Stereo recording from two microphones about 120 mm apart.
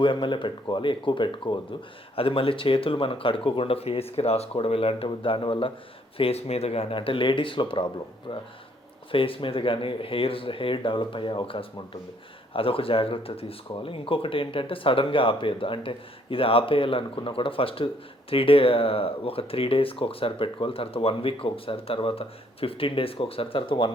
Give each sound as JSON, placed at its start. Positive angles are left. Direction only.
{"t": 0.0, "sound": "speech", "side_deg": 40}